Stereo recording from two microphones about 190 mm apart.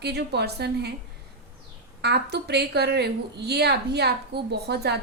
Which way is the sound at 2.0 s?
60° right (ahead or behind).